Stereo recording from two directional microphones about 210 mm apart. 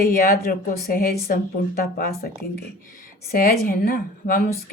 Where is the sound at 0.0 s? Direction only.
45° left (ahead or behind).